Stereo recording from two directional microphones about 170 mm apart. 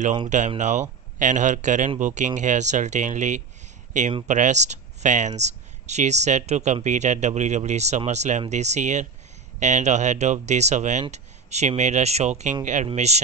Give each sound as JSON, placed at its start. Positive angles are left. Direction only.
{"t": 0.6, "sound": "speech", "side_deg": -45}